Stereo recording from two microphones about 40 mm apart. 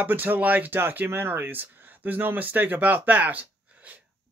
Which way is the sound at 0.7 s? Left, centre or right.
Right.